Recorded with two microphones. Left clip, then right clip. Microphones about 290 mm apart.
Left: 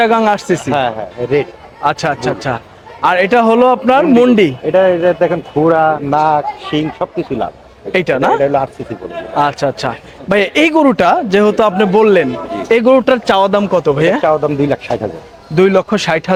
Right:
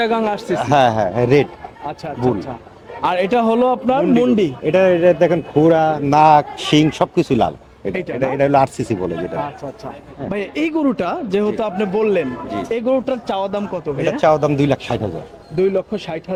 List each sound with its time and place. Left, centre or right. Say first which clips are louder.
0.0 s a man's voice: left 7 dB; centre
0.7 s a man's voice: right 6 dB; right
1.9 s speech: left 6 dB; left
3.0 s a man's voice: left 6 dB; centre
4.7 s a man's voice: left 1 dB; right
6.1 s speech: right 1 dB; right
7.9 s speech: left 9 dB; left
8.4 s speech: left 1 dB; right
9.6 s a man's voice: left 14 dB; left
10.3 s a man's voice: left 11 dB; centre
14.2 s speech: left 2 dB; right
15.5 s a man's voice: left 7 dB; left